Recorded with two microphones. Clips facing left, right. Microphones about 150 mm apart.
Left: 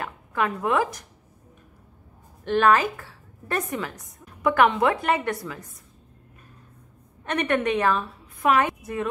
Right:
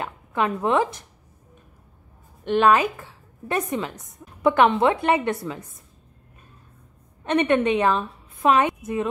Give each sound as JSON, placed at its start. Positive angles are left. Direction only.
{"t": 0.0, "sound": "a woman's voice", "side_deg": -25}
{"t": 2.4, "sound": "a woman's voice", "side_deg": -20}
{"t": 7.2, "sound": "a woman's voice", "side_deg": -20}